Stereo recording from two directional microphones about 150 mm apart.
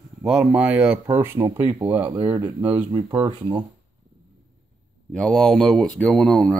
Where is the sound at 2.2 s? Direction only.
30° right (ahead or behind).